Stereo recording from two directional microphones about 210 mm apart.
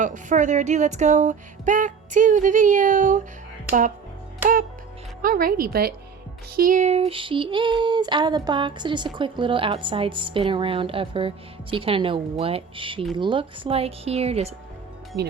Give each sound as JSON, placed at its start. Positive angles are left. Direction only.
{"t": 0.0, "sound": "a sound", "side_deg": -35}
{"t": 3.7, "sound": "speech", "side_deg": -40}
{"t": 5.2, "sound": "speech", "side_deg": -40}
{"t": 6.6, "sound": "child singing", "side_deg": -40}